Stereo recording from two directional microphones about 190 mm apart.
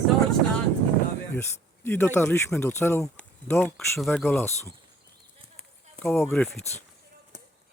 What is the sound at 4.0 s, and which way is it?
Speech, centre (ahead or behind).